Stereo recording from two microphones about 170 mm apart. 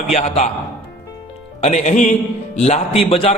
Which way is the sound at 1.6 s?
40° left (ahead or behind).